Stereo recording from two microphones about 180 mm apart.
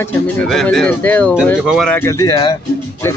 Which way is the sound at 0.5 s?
Centre (ahead or behind).